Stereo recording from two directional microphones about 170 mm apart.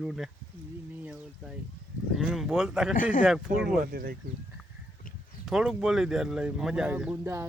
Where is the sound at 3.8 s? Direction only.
60° right (ahead or behind).